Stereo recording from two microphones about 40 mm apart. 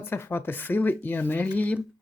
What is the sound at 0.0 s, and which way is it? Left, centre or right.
Speech, left.